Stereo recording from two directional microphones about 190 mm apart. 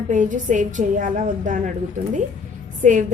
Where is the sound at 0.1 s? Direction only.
40° right (ahead or behind).